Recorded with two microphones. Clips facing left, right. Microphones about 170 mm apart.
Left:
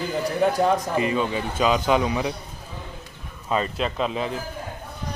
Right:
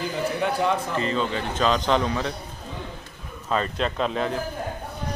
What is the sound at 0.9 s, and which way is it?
A man's voice, 15° left (ahead or behind).